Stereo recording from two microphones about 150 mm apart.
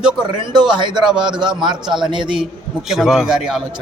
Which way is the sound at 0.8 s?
30° right (ahead or behind).